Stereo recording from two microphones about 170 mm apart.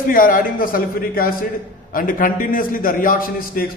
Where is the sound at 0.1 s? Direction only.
55° left (ahead or behind).